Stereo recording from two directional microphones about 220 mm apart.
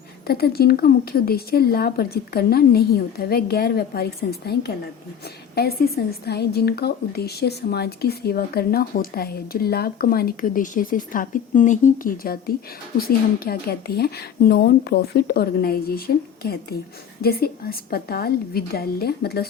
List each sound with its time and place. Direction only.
0.3 s a woman's voice: 45° left (ahead or behind)